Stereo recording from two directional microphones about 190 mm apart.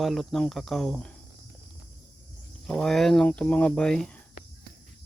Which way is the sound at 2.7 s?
5° left (ahead or behind).